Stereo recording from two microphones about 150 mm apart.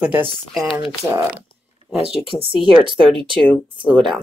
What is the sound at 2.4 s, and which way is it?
Speech, 35° right (ahead or behind).